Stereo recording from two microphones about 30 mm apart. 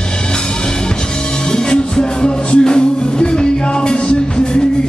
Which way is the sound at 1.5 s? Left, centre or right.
Left.